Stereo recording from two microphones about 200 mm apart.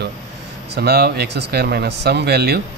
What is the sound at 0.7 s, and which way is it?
Speech, 55° right (ahead or behind).